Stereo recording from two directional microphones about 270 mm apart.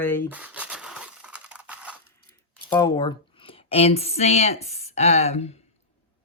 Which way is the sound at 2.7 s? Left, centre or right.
Centre.